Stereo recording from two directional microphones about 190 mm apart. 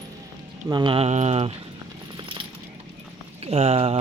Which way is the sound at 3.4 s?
30° right (ahead or behind).